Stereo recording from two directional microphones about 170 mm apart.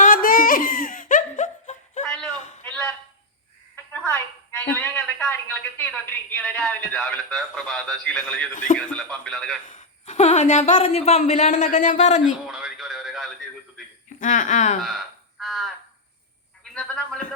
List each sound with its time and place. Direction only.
0.0 s a sound: 55° left (ahead or behind)
4.6 s a woman's voice: 15° left (ahead or behind)
8.5 s speech: 50° left (ahead or behind)
8.9 s a man's voice: 5° left (ahead or behind)
9.6 s speech: 45° left (ahead or behind)
12.5 s radio: 5° right (ahead or behind)
14.2 s speech: 45° left (ahead or behind)
15.4 s frog: centre (ahead or behind)
16.7 s a man's voice: 5° left (ahead or behind)